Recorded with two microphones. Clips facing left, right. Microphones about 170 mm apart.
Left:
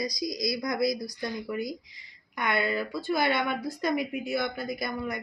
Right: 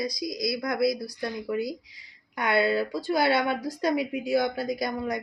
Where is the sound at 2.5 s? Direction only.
35° right (ahead or behind).